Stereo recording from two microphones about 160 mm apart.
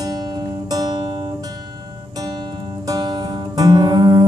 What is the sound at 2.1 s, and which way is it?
Music, 25° right (ahead or behind).